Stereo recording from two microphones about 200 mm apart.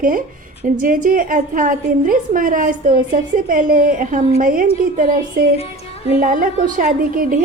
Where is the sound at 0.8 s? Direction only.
45° right (ahead or behind).